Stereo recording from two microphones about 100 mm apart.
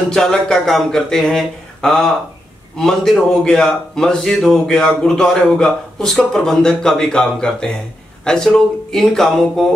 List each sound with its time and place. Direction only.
0.1 s a man's voice: 5° left (ahead or behind)